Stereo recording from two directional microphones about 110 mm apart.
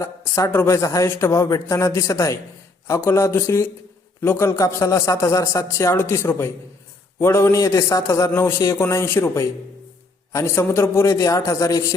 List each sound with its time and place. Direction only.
0.0 s speech: 30° left (ahead or behind)